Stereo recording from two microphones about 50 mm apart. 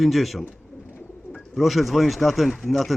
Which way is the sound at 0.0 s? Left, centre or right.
Centre.